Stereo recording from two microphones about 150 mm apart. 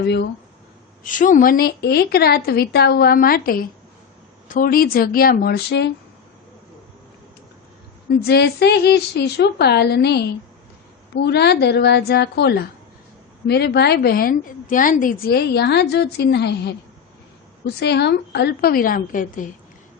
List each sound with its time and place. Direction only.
0.0 s a woman's voice: 90° left
1.0 s a woman's voice: 60° left (ahead or behind); by 5.7 s 90° left
8.2 s a woman's voice: 90° left
17.7 s a woman's voice: 90° left; by 19.5 s 60° left (ahead or behind)